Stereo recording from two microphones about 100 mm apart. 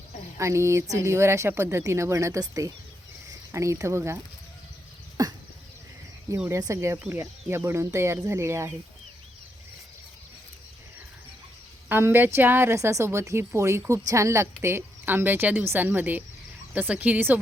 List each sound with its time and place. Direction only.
0.3 s a woman's voice: 30° right (ahead or behind)
5.2 s a sound: 35° right (ahead or behind)
6.5 s a woman's voice: 30° right (ahead or behind)
11.9 s a woman's voice: 20° right (ahead or behind)